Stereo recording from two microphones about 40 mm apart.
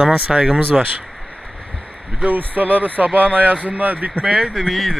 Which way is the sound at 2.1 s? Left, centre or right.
Right.